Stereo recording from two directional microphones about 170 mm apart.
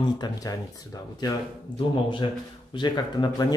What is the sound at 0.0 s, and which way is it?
Speech, 20° left (ahead or behind).